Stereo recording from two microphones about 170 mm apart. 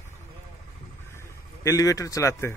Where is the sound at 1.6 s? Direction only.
20° left (ahead or behind).